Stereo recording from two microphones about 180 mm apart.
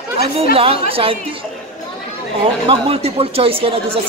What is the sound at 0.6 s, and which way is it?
Speech, 30° right (ahead or behind).